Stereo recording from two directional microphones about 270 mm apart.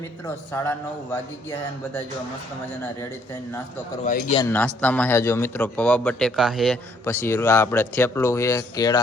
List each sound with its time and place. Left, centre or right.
0.5 s a man's voice: centre
4.0 s speech: left
4.4 s a man's voice: centre